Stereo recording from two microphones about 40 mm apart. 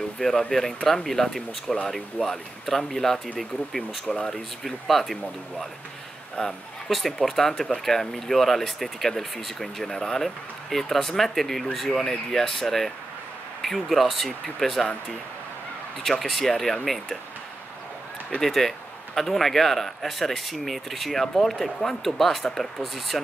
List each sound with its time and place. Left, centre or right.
0.2 s speech: centre
6.4 s speech: left
6.9 s speech: centre
16.0 s speech: centre
18.4 s speech: centre